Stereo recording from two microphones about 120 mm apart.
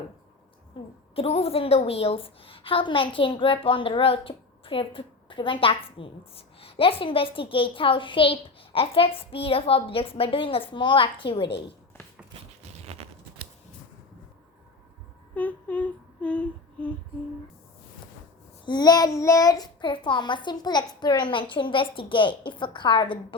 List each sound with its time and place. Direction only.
0.8 s a woman's voice: 45° left (ahead or behind)
12.9 s scissors: 60° right (ahead or behind)
15.4 s humming: 15° left (ahead or behind)
18.6 s a child's voice: 35° left (ahead or behind)